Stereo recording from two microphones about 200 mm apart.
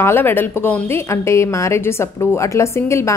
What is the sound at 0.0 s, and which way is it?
A woman's voice, 10° left (ahead or behind).